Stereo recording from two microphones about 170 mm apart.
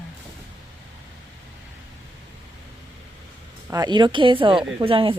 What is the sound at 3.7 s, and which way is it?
A woman's voice, 25° right (ahead or behind).